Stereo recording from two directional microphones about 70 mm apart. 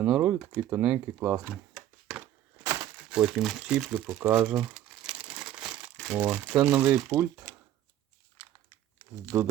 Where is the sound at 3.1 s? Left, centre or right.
Centre.